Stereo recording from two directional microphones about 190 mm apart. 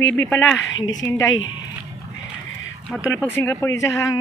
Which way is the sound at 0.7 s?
80° left.